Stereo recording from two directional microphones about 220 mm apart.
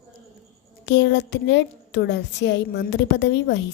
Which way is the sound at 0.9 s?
55° left (ahead or behind).